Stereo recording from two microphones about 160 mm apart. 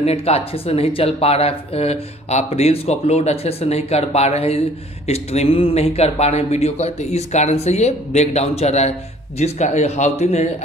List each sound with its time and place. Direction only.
0.0 s a man's voice: 40° left (ahead or behind)